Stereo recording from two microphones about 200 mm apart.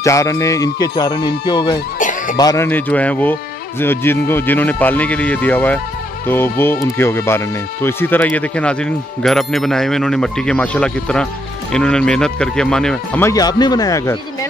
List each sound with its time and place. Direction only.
0.0 s speech: 15° left (ahead or behind)
2.0 s music: 40° left (ahead or behind)
2.3 s speech: 15° left (ahead or behind)